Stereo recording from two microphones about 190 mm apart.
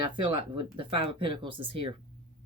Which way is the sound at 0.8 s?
25° right (ahead or behind).